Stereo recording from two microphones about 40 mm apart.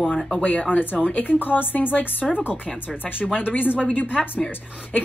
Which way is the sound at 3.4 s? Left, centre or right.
Left.